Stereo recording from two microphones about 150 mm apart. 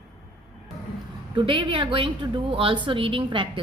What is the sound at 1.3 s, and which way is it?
A woman's voice, 30° right (ahead or behind).